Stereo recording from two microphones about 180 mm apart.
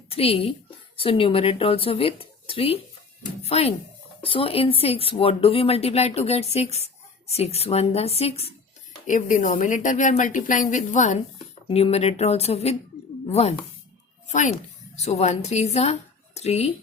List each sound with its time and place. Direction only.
0.1 s speech: 35° left (ahead or behind)
9.0 s a woman's voice: 45° left (ahead or behind)